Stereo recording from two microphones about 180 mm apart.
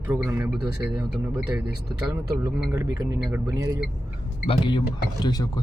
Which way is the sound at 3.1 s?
Centre (ahead or behind).